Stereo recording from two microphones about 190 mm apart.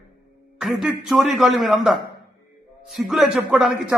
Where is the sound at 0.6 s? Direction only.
Centre (ahead or behind).